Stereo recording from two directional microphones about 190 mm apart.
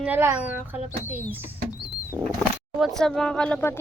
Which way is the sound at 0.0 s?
10° right (ahead or behind).